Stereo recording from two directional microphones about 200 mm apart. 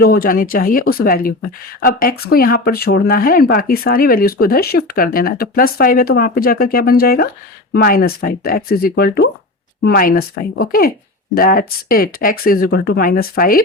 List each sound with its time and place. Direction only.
0.0 s speech: 50° left (ahead or behind)